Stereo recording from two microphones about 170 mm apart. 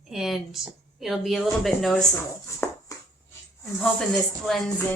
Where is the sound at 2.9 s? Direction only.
20° left (ahead or behind).